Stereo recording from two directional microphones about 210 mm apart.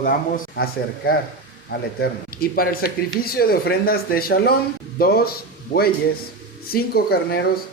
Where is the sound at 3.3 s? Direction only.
45° left (ahead or behind).